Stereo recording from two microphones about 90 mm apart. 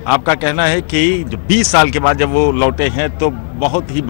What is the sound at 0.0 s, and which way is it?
A man's voice, centre (ahead or behind).